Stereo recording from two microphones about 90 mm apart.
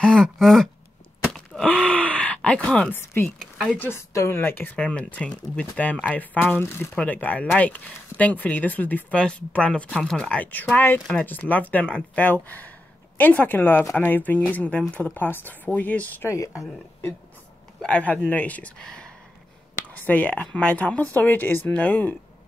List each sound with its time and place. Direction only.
0.0 s speech: 10° left (ahead or behind)
1.3 s groan: centre (ahead or behind)
1.7 s groan: 10° left (ahead or behind)
2.9 s speech: 25° left (ahead or behind)
3.3 s speech: 10° left (ahead or behind)
3.8 s speech: 30° left (ahead or behind); by 6.0 s 15° left (ahead or behind)
6.5 s speech: 30° left (ahead or behind)
7.0 s speech: 20° left (ahead or behind)
16.3 s speech: 35° left (ahead or behind)
17.8 s speech: 15° left (ahead or behind)